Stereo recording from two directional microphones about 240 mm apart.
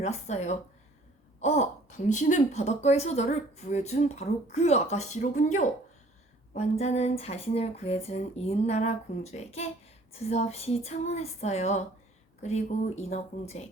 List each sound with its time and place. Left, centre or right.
0.0 s speech: left